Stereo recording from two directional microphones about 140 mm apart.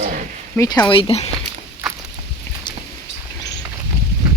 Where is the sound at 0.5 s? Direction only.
25° left (ahead or behind).